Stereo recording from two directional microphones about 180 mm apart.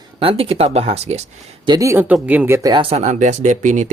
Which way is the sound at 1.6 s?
20° right (ahead or behind).